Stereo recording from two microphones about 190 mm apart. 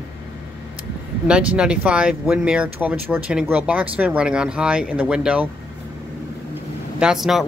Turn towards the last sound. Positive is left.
turn(degrees=0)  # may be behind; listen again after turning